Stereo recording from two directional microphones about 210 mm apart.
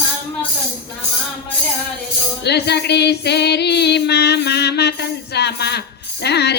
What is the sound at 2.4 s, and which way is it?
Female singing, 50° left (ahead or behind).